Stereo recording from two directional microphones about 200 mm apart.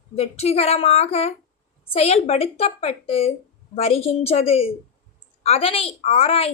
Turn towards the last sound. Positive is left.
turn(degrees=30)  # may be behind; listen again after turning